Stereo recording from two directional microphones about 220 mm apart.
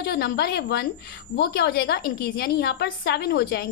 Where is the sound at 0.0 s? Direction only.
50° left (ahead or behind).